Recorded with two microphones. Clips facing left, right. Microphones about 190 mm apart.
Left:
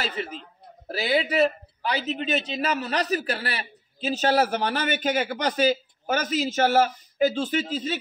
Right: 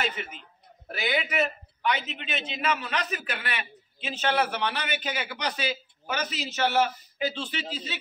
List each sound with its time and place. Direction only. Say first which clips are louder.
0.0 s speech: left 2 dB; 35° left (ahead or behind)